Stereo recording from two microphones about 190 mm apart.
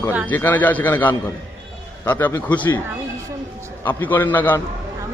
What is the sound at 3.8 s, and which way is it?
Speech, 10° left (ahead or behind).